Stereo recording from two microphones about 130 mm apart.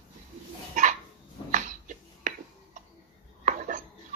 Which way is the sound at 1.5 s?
85° right.